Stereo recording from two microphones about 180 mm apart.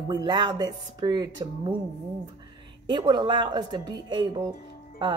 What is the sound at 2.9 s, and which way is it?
Speech, 25° right (ahead or behind).